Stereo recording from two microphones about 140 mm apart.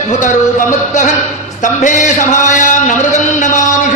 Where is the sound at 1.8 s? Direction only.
60° left (ahead or behind).